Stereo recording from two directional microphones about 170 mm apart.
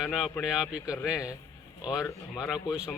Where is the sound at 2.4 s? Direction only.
5° right (ahead or behind).